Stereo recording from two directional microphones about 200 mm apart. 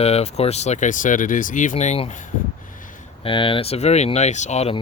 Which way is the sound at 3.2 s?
25° left (ahead or behind).